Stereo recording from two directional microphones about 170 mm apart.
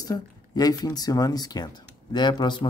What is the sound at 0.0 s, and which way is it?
Speech, 20° left (ahead or behind).